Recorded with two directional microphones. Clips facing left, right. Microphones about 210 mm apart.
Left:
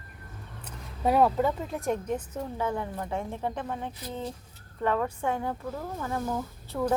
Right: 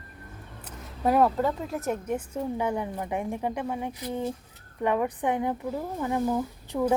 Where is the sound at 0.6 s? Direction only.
5° right (ahead or behind).